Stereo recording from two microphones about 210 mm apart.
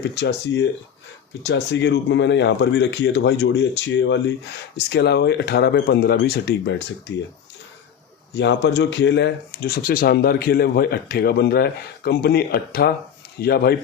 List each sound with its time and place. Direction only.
0.1 s speech: 55° left (ahead or behind)
8.4 s speech: 55° left (ahead or behind)